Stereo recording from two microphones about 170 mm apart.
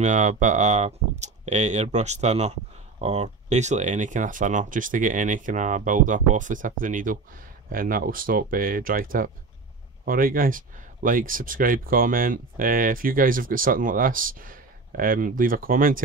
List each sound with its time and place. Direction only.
0.0 s speech: 45° right (ahead or behind)